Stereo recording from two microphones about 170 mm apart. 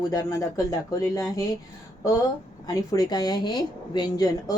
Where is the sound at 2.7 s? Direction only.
20° left (ahead or behind).